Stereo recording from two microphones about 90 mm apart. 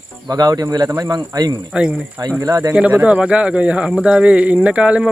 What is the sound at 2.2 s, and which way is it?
Speech, 50° right (ahead or behind).